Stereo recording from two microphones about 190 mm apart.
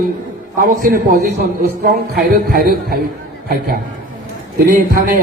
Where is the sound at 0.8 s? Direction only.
55° right (ahead or behind).